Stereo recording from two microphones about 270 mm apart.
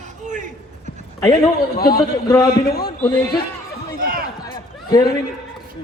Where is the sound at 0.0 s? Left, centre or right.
Right.